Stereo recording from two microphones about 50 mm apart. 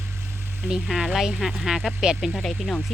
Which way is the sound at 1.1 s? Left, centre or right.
Centre.